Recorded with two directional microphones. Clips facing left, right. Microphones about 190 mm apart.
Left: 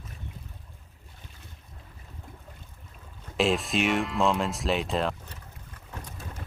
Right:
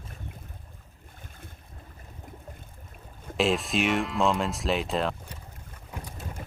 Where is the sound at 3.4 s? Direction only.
Centre (ahead or behind).